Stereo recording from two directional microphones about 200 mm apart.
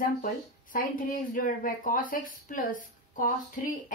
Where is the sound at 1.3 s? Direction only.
45° left (ahead or behind).